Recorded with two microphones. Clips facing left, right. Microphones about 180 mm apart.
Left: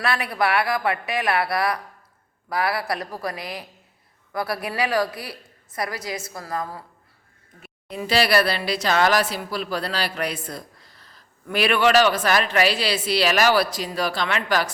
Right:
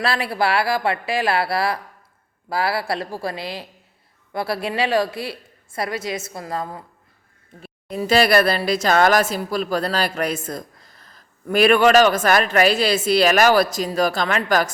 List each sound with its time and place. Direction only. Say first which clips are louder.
0.0 s a woman's voice: right 2 dB; 30° right (ahead or behind)
7.9 s speech: right 4 dB; 45° right (ahead or behind)